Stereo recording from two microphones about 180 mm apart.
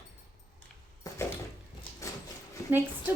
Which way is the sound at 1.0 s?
20° left (ahead or behind).